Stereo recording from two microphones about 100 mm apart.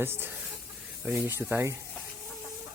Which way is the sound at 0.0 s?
25° right (ahead or behind).